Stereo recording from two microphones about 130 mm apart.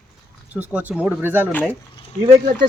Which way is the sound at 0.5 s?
10° right (ahead or behind).